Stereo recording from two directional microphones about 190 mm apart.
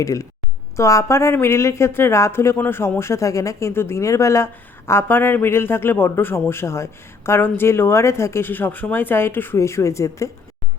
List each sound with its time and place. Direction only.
0.0 s a woman's voice: 15° left (ahead or behind)